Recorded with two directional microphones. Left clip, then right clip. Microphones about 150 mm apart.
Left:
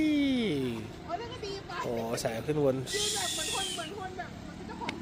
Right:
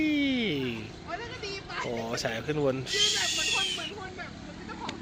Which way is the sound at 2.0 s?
Centre (ahead or behind).